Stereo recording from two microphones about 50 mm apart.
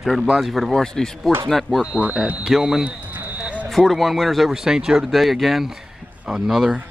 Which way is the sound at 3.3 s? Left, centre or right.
Right.